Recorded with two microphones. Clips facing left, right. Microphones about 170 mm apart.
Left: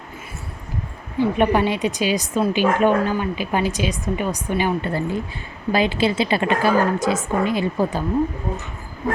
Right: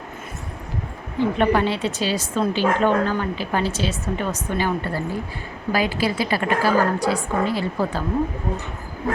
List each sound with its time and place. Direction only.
1.2 s a woman's voice: 15° left (ahead or behind)